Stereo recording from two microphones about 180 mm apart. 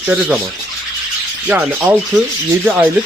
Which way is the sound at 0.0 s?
10° right (ahead or behind).